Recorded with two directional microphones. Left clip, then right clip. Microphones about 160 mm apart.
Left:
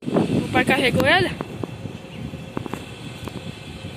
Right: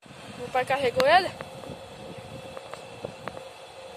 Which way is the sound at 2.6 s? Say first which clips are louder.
Left 13 dB; centre (ahead or behind).